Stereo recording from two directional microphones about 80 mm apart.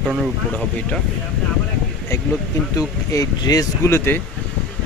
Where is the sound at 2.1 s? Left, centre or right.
Left.